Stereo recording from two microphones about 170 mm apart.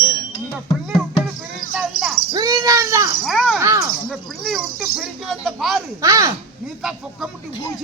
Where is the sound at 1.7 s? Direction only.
5° right (ahead or behind).